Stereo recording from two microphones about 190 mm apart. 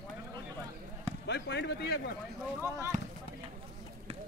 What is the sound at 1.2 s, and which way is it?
Run, 65° left (ahead or behind).